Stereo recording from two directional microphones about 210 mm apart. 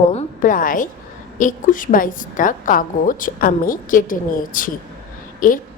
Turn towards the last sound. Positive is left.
turn(degrees=40)  # may be behind; listen again after turning